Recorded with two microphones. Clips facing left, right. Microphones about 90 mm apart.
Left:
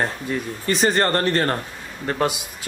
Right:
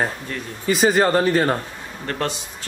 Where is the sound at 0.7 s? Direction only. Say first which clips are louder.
Right 3 dB; 5° right (ahead or behind).